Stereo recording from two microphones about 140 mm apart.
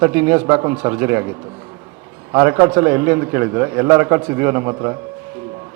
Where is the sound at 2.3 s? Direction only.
20° right (ahead or behind).